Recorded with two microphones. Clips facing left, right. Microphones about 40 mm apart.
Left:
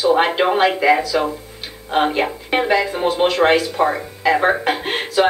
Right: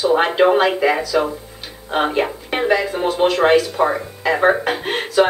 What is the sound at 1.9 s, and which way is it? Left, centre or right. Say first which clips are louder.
Speech: left 1 dB; centre.